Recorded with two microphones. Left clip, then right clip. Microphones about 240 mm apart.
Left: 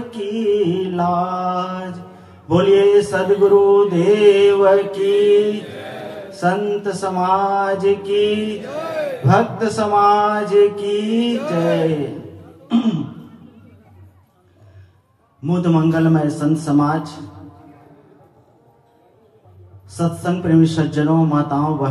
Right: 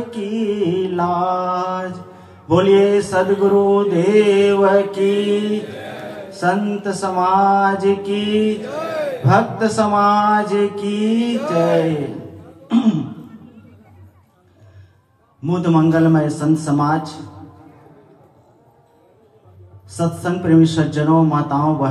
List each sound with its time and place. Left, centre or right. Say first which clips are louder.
0.1 s mantra: left 6 dB; right
8.6 s a man's voice: right 1 dB; right
9.2 s mantra: right 1 dB; right
12.6 s a man's voice: right 2 dB; right
15.4 s mantra: right 2 dB; right
19.9 s mantra: right 1 dB; right